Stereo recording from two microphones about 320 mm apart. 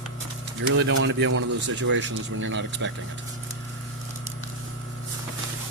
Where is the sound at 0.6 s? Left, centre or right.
Right.